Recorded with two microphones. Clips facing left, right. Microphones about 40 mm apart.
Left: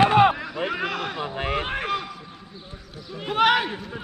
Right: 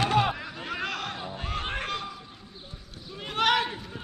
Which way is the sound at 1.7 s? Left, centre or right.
Centre.